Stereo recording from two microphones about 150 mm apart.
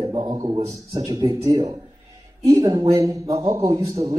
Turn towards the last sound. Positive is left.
turn(degrees=-25)  # may be behind; listen again after turning